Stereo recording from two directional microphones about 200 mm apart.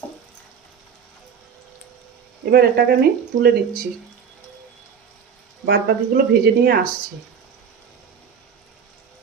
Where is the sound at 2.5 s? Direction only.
50° right (ahead or behind).